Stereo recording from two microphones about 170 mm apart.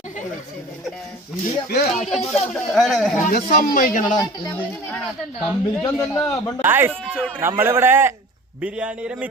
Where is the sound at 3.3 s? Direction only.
55° left (ahead or behind).